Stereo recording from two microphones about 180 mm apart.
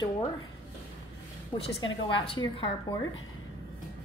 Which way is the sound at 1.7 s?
30° left (ahead or behind).